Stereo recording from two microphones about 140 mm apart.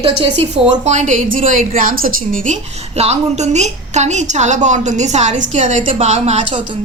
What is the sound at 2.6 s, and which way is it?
A woman's voice, 50° right (ahead or behind).